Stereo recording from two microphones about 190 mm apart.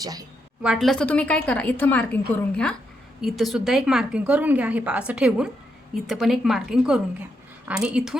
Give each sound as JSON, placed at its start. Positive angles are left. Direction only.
{"t": 0.0, "sound": "a woman's voice", "side_deg": -20}
{"t": 0.6, "sound": "a woman's voice", "side_deg": 0}